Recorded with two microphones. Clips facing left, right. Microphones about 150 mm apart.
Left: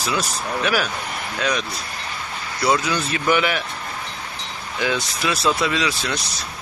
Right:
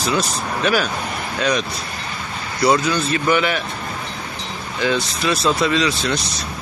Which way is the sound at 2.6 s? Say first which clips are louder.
Right 4 dB; 10° left (ahead or behind).